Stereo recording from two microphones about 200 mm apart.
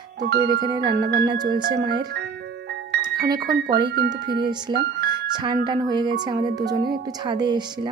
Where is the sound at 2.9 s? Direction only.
55° right (ahead or behind).